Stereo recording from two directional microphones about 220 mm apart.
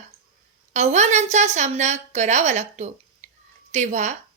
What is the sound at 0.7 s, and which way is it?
A woman's voice, 30° right (ahead or behind).